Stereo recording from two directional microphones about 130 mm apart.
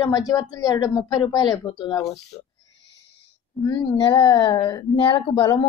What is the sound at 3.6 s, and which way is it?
A woman's voice, 30° left (ahead or behind).